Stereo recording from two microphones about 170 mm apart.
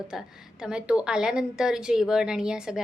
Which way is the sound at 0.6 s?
5° right (ahead or behind).